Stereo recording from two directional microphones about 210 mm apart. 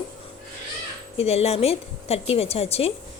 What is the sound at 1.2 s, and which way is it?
A woman's voice, 30° left (ahead or behind).